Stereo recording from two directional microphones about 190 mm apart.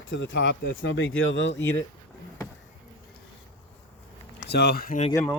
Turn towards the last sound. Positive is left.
turn(degrees=15)  # may be behind; listen again after turning